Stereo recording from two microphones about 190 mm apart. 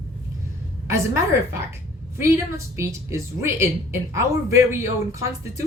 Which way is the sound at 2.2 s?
15° right (ahead or behind).